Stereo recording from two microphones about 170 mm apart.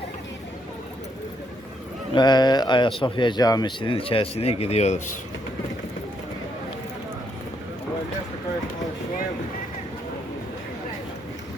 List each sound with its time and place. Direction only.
2.1 s speech: 25° left (ahead or behind); by 5.1 s 40° left (ahead or behind)